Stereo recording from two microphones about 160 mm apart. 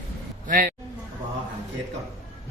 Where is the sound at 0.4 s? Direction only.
60° right (ahead or behind).